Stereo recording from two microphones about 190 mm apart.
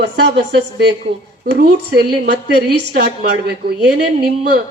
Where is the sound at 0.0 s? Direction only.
65° right (ahead or behind).